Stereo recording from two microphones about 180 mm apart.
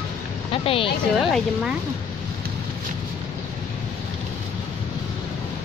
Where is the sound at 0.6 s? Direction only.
30° left (ahead or behind).